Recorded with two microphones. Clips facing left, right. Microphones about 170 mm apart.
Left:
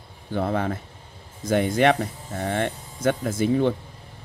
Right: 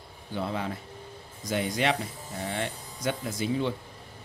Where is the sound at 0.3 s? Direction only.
55° left (ahead or behind).